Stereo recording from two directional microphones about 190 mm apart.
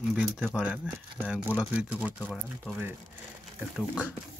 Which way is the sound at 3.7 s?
5° right (ahead or behind).